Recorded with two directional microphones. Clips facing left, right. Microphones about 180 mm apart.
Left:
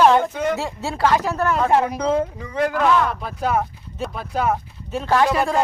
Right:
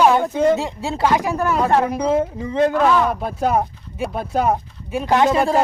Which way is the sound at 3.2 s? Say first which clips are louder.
Right 3 dB; 45° right (ahead or behind).